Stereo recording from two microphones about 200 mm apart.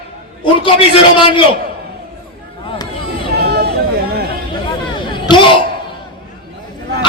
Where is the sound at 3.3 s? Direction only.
55° right (ahead or behind).